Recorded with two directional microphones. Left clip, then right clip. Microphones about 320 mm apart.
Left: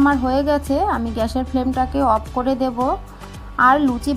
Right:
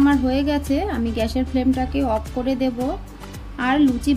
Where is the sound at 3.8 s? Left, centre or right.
Centre.